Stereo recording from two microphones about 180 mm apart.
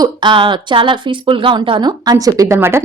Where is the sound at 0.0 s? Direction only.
25° right (ahead or behind).